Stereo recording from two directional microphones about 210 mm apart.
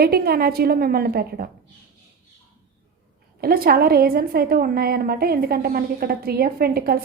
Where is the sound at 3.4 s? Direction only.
45° right (ahead or behind).